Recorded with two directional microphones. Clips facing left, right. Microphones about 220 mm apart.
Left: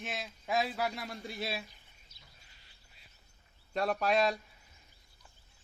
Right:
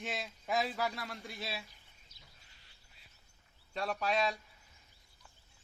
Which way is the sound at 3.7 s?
60° left (ahead or behind).